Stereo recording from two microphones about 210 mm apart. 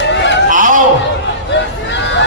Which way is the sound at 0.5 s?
40° right (ahead or behind).